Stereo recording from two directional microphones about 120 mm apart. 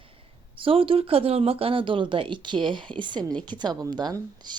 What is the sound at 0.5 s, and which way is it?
A woman's voice, 50° right (ahead or behind).